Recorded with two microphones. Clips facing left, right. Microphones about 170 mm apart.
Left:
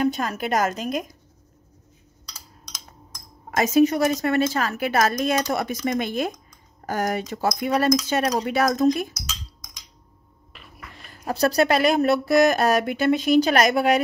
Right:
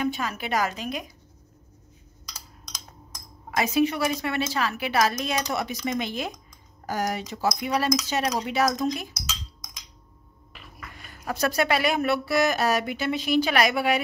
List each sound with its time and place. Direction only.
0.0 s a woman's voice: 40° left (ahead or behind)
3.4 s a woman's voice: 45° left (ahead or behind)
11.1 s a woman's voice: 35° left (ahead or behind)